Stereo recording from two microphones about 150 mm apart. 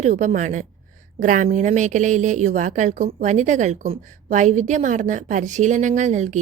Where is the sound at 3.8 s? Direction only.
40° right (ahead or behind).